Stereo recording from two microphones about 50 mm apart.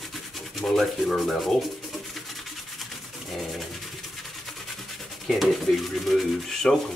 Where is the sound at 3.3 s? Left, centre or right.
Centre.